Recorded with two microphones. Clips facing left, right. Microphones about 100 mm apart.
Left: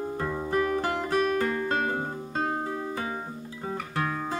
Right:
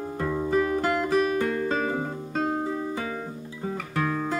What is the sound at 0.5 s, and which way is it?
Music, 20° right (ahead or behind).